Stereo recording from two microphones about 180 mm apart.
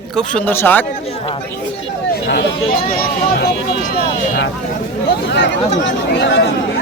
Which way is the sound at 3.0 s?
55° left (ahead or behind).